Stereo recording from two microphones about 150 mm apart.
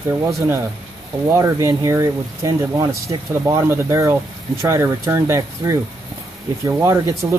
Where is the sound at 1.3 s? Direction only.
20° right (ahead or behind).